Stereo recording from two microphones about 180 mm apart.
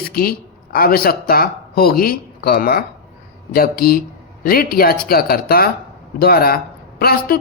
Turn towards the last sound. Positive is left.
turn(degrees=55)  # may be behind; listen again after turning